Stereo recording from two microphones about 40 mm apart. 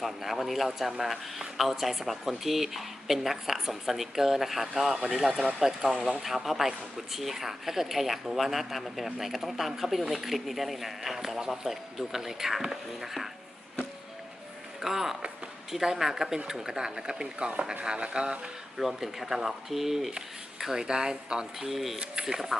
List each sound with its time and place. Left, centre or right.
0.0 s speech: centre
6.2 s speech: centre
14.8 s speech: centre
18.8 s speech: centre
21.7 s speech: centre
21.9 s speech: centre